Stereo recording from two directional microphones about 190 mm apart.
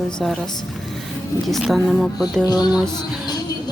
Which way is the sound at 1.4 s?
Centre (ahead or behind).